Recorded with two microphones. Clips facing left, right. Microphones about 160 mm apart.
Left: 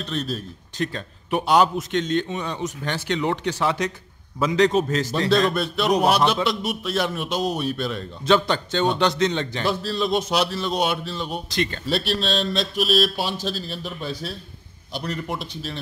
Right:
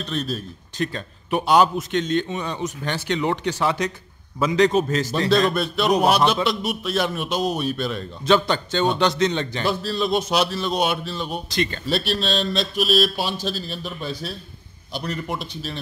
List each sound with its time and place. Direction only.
0.1 s a man's voice: 5° right (ahead or behind)
8.3 s a man's voice: 5° right (ahead or behind)
10.3 s a man's voice: 15° right (ahead or behind)